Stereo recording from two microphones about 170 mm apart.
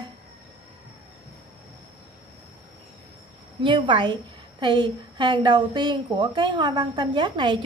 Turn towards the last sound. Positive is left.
turn(degrees=-25)  # may be behind; listen again after turning